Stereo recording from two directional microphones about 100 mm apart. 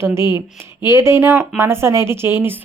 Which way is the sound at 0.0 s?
25° right (ahead or behind).